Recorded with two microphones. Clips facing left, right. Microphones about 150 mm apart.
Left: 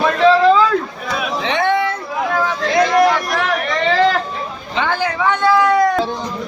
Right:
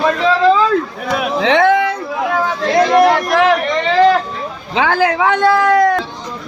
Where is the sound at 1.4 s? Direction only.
90° right.